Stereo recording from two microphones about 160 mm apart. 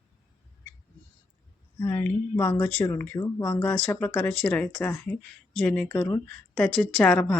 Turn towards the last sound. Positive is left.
turn(degrees=5)  # may be behind; listen again after turning